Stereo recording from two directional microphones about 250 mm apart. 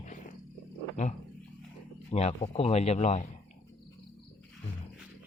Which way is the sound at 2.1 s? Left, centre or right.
Left.